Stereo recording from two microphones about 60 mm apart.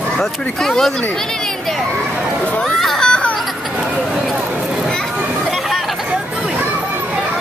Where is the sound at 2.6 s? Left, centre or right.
Centre.